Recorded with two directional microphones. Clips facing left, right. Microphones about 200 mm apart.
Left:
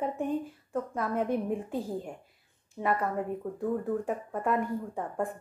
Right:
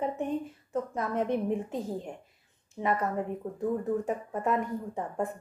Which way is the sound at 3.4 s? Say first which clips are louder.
Left 1 dB; 15° right (ahead or behind).